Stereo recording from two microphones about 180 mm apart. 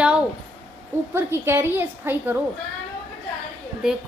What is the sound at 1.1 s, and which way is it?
A woman's voice, 15° right (ahead or behind).